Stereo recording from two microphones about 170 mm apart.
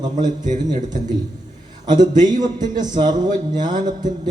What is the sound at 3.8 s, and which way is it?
Speech, 25° right (ahead or behind).